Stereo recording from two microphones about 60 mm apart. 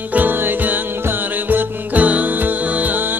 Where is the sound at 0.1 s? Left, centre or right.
Right.